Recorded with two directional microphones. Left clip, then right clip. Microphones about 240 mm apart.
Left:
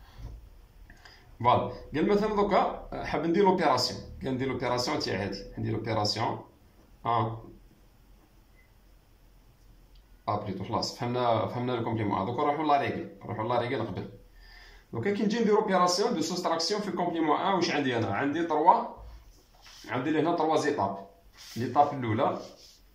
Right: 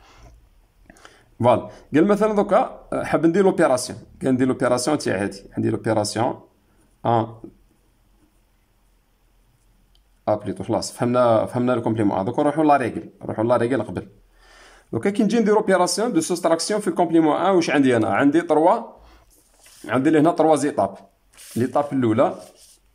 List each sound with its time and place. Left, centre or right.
1.4 s speech: right
10.2 s speech: right
14.9 s speech: right
19.8 s speech: right